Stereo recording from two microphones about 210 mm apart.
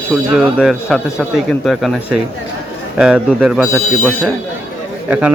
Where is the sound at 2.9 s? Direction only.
5° right (ahead or behind).